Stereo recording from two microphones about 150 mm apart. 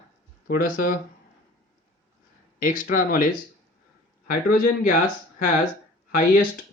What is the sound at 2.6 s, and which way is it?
Speech, 65° left (ahead or behind).